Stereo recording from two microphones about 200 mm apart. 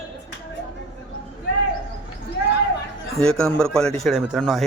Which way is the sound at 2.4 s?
55° left (ahead or behind).